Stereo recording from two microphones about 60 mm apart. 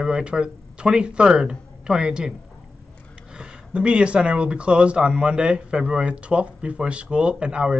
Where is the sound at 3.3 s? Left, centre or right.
Centre.